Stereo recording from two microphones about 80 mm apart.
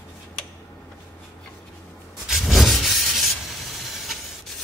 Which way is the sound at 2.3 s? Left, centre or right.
Centre.